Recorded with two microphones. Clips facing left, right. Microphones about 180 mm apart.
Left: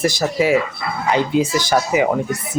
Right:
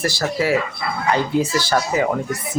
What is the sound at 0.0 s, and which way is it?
Speech, 20° left (ahead or behind).